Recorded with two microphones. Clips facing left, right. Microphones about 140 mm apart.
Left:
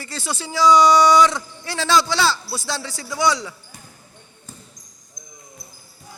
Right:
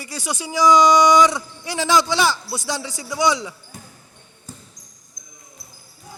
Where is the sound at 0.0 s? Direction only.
15° right (ahead or behind).